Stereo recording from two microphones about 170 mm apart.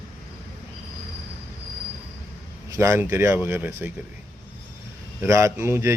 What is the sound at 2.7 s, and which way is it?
Speech, 15° right (ahead or behind).